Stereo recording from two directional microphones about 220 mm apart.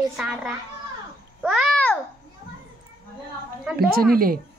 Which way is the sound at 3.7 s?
40° right (ahead or behind).